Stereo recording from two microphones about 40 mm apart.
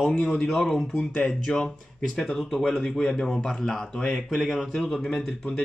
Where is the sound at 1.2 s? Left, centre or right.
Centre.